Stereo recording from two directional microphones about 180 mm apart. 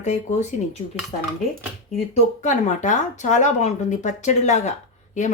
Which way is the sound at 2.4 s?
45° left (ahead or behind).